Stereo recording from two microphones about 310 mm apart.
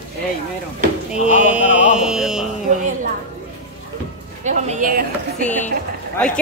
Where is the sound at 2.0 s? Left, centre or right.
Centre.